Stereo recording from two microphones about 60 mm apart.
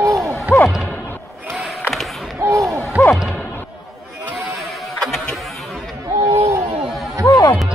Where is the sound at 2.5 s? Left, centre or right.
Right.